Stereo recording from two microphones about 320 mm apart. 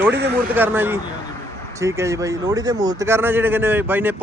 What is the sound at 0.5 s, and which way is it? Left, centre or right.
A man's voice, centre.